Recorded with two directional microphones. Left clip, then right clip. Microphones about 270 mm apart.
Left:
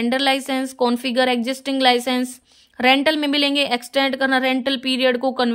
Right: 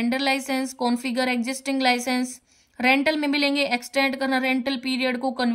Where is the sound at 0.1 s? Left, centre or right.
Centre.